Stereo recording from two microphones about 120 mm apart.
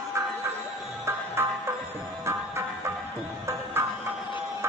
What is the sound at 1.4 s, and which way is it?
Music, 20° right (ahead or behind).